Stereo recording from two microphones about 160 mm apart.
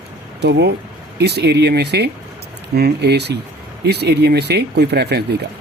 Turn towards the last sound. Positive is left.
turn(degrees=-90)